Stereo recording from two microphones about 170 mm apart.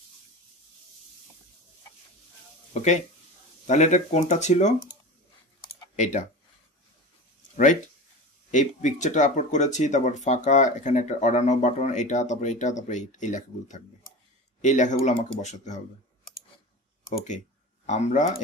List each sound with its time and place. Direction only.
2.7 s speech: 45° left (ahead or behind)
5.9 s speech: 45° left (ahead or behind)
8.5 s speech: 45° left (ahead or behind)
17.8 s speech: 45° left (ahead or behind)